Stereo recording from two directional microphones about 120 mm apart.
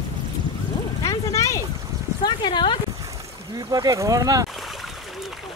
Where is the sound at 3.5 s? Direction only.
30° right (ahead or behind).